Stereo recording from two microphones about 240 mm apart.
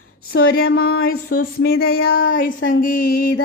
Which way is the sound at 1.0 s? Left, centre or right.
Left.